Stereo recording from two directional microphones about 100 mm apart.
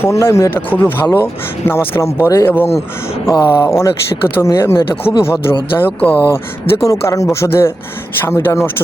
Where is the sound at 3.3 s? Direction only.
45° left (ahead or behind).